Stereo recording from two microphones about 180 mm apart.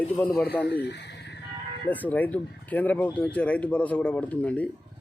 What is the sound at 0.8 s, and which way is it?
Speech, 70° left (ahead or behind).